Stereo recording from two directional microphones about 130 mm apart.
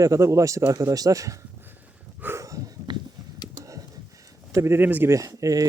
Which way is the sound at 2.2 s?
20° right (ahead or behind).